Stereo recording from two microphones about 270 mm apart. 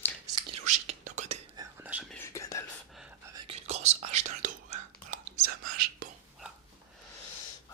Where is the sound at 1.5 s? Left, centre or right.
Centre.